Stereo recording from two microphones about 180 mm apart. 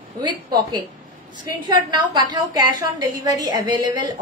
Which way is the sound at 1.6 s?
25° right (ahead or behind).